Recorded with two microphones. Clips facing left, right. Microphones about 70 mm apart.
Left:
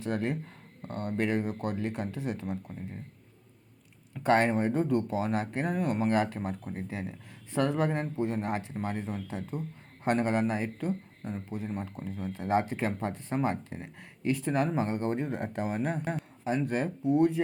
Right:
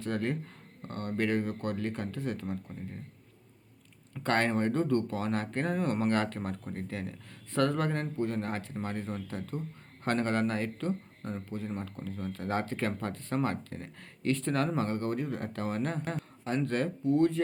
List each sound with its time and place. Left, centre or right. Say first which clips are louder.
0.0 s speech: left 1 dB; centre
4.1 s speech: left 4 dB; centre